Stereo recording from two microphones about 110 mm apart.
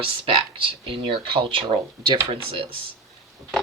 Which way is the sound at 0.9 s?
55° right (ahead or behind).